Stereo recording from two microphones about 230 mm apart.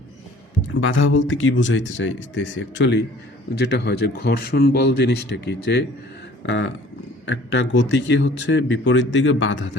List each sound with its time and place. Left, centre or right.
0.8 s a man's voice: left
6.4 s a sound: left
7.3 s a man's voice: left